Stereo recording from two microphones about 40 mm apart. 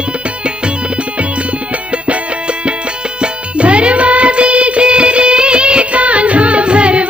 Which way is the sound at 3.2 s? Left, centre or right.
Right.